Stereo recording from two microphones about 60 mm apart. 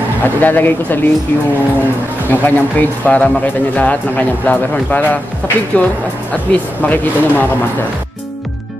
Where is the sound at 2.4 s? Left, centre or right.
Left.